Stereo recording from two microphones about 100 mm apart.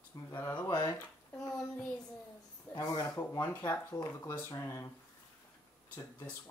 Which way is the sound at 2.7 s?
35° left (ahead or behind).